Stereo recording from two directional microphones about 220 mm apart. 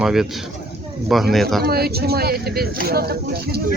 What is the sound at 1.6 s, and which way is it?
Speech, 45° right (ahead or behind).